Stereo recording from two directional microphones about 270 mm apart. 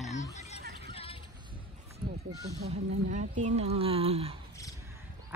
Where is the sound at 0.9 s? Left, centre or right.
Left.